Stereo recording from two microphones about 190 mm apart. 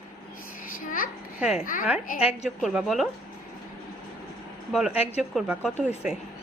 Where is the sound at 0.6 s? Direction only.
45° left (ahead or behind).